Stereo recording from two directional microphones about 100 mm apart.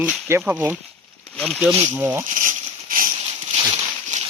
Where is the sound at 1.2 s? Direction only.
10° left (ahead or behind).